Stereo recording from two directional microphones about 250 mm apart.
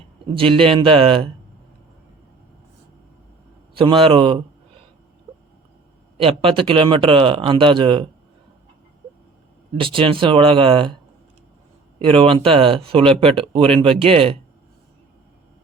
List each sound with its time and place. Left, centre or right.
0.3 s speech: right
3.8 s speech: right
6.1 s speech: right
9.7 s speech: right
11.9 s speech: right